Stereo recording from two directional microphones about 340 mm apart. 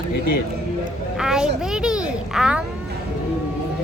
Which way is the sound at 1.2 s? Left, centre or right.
Centre.